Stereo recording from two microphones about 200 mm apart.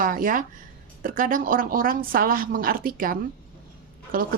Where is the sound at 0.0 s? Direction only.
45° right (ahead or behind).